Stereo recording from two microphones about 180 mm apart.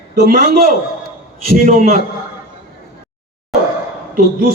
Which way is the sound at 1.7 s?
45° right (ahead or behind).